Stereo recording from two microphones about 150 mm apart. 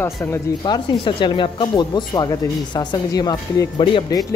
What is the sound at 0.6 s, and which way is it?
Speech, 30° left (ahead or behind).